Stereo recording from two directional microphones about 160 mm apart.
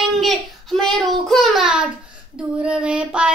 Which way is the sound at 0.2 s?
Centre (ahead or behind).